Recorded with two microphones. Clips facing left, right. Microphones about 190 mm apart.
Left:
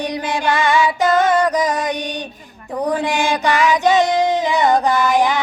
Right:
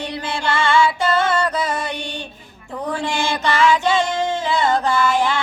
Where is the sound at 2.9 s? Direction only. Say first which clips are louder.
Left 4 dB; 15° left (ahead or behind).